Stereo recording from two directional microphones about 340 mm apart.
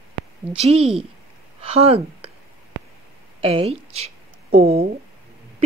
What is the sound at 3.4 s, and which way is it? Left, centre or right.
A woman's voice, centre.